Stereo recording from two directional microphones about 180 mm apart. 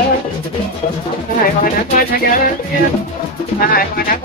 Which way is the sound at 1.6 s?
50° left (ahead or behind).